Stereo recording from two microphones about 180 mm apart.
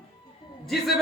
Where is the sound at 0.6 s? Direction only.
Centre (ahead or behind).